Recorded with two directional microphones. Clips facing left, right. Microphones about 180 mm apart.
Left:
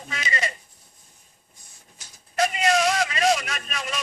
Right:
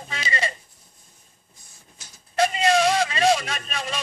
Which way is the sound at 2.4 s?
30° right (ahead or behind).